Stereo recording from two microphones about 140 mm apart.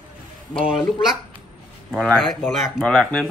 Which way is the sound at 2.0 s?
Centre (ahead or behind).